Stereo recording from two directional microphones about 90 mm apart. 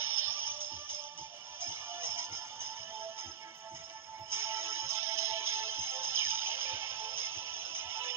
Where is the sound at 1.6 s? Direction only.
30° right (ahead or behind).